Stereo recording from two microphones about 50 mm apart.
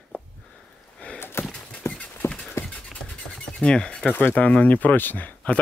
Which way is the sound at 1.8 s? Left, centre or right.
Left.